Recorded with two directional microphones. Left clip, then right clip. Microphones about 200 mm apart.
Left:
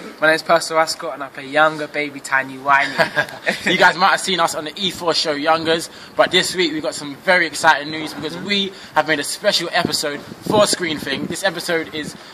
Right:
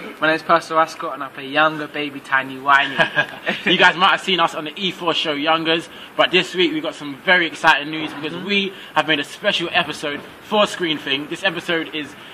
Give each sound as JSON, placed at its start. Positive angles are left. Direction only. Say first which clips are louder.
{"t": 0.2, "sound": "speech", "louder": "left 2 dB", "side_deg": 30}
{"t": 2.6, "sound": "speech", "louder": "right 1 dB", "side_deg": 20}